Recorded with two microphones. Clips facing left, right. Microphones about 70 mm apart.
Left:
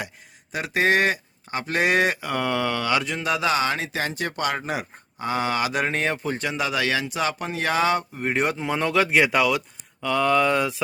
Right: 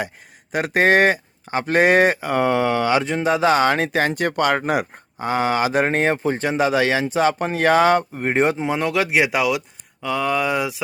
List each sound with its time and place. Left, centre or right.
0.5 s speech: right
5.2 s speech: right
8.7 s speech: centre